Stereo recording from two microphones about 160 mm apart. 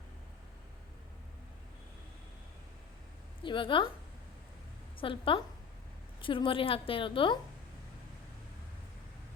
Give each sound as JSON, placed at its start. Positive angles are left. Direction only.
{"t": 3.4, "sound": "a woman's voice", "side_deg": 30}
{"t": 4.9, "sound": "a woman's voice", "side_deg": 35}